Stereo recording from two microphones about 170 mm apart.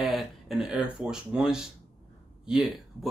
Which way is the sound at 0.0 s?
Centre (ahead or behind).